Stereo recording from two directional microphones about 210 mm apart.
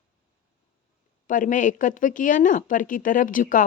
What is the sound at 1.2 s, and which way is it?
Speech, 40° left (ahead or behind).